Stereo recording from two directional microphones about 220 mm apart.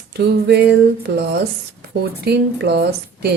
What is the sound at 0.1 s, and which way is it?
Speech, 50° right (ahead or behind).